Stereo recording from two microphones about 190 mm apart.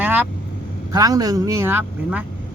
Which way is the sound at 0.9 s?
20° right (ahead or behind).